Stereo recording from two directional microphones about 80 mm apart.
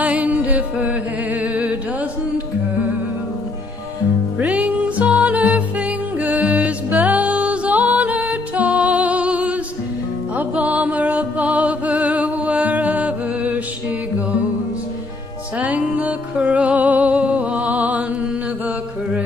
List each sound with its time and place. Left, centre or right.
0.0 s music: centre
1.5 s a sound: centre
4.6 s music: centre
15.6 s music: centre